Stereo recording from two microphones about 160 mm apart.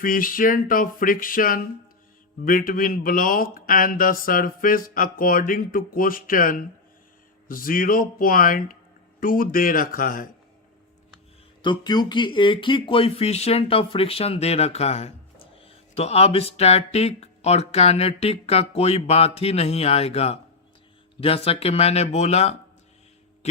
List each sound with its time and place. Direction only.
0.0 s speech: 60° left (ahead or behind)
11.6 s speech: 30° left (ahead or behind); by 22.5 s 45° left (ahead or behind)